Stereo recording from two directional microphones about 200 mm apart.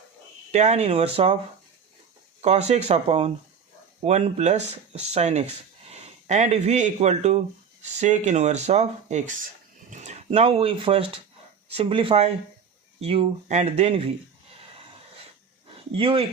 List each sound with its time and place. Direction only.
0.5 s speech: 30° right (ahead or behind)
2.4 s speech: 30° right (ahead or behind)
16.0 s speech: 25° right (ahead or behind)